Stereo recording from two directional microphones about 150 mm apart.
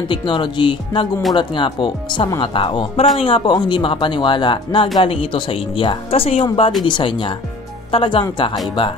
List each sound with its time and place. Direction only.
0.1 s speech: 35° left (ahead or behind)